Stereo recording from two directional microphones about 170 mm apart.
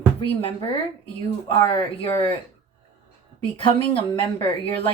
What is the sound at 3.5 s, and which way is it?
Speech, 30° left (ahead or behind).